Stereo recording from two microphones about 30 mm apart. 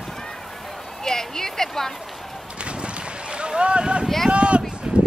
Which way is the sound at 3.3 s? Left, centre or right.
Right.